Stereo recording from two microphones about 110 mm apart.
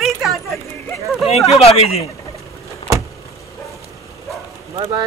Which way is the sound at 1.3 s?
65° left (ahead or behind).